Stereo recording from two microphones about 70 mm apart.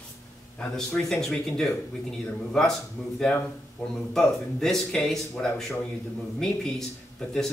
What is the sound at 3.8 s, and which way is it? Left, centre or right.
Speech, centre.